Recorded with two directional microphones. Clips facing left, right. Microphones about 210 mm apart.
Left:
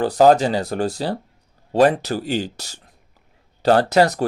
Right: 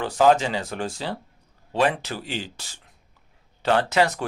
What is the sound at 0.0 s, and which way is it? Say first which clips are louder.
Speech: left 5 dB; 35° left (ahead or behind).